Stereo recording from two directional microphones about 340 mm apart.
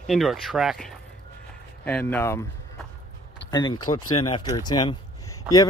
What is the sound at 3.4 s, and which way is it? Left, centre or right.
Speech, centre.